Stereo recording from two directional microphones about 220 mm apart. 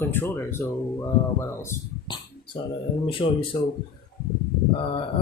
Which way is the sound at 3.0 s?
25° left (ahead or behind).